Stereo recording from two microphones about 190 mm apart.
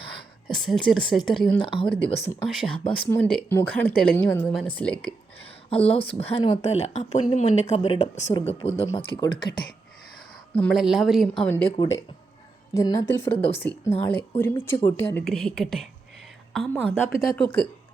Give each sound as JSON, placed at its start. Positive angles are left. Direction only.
{"t": 0.4, "sound": "a woman's voice", "side_deg": 0}
{"t": 1.6, "sound": "speech", "side_deg": 25}
{"t": 2.5, "sound": "a woman's voice", "side_deg": 0}
{"t": 5.7, "sound": "speech", "side_deg": 30}
{"t": 8.3, "sound": "speech", "side_deg": 25}
{"t": 10.5, "sound": "a woman's voice", "side_deg": 5}
{"t": 11.4, "sound": "speech", "side_deg": 10}
{"t": 12.7, "sound": "a woman's voice", "side_deg": 15}